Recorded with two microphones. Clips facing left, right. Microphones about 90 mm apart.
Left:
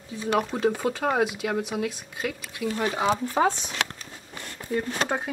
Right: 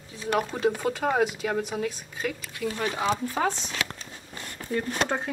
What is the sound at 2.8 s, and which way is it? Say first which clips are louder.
Speech: left 2 dB; 20° left (ahead or behind).